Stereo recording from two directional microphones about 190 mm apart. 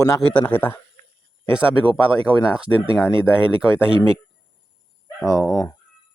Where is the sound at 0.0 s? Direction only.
10° left (ahead or behind).